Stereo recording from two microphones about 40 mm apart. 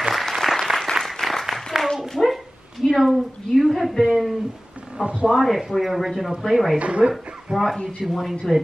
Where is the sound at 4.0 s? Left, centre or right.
Centre.